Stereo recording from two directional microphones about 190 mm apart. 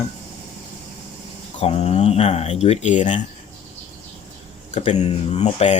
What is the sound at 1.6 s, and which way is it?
Speech, 35° left (ahead or behind).